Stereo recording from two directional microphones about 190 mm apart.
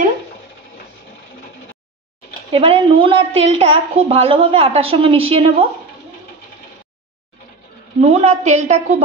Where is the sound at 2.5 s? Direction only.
30° right (ahead or behind).